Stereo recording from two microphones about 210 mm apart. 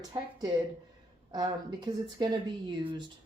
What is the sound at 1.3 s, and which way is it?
Speech, 20° right (ahead or behind).